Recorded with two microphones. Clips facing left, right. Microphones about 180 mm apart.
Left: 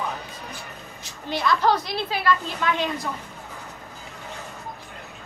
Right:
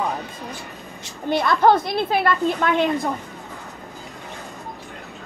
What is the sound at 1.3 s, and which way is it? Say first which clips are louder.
A woman's voice: right 5 dB; 55° right (ahead or behind).